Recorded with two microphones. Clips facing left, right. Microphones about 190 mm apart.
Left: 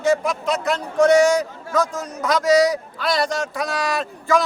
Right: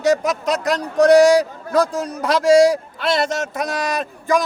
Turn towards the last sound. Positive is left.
turn(degrees=-20)  # may be behind; listen again after turning